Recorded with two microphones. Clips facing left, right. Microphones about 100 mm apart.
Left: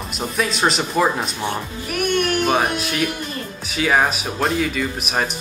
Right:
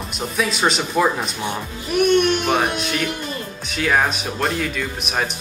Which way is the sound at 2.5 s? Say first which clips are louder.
Left 1 dB; 5° left (ahead or behind).